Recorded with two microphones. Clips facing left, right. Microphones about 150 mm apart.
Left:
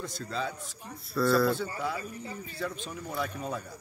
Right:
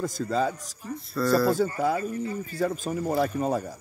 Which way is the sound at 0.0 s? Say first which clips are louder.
Right 9 dB; 45° right (ahead or behind).